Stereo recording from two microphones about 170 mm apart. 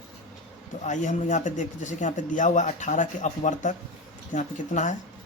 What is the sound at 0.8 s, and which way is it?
Speech, 45° left (ahead or behind).